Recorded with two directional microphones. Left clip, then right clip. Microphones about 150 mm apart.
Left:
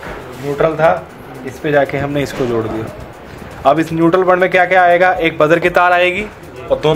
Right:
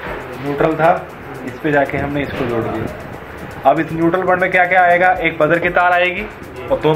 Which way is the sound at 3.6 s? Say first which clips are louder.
Left 2 dB; 90° left.